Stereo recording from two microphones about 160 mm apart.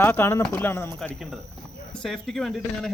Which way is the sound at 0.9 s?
Centre (ahead or behind).